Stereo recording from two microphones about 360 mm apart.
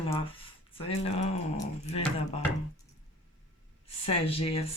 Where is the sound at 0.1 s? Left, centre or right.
Centre.